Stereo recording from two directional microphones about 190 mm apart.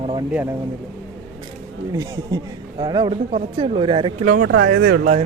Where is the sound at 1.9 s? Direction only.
20° right (ahead or behind).